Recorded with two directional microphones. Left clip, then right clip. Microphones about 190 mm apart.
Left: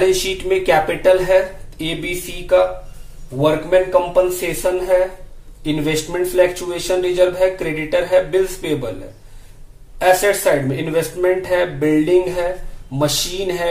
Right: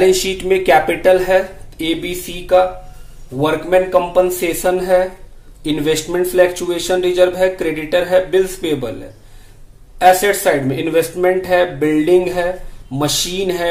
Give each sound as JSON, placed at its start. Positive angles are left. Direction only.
{"t": 0.0, "sound": "speech", "side_deg": -25}
{"t": 10.1, "sound": "speech", "side_deg": -25}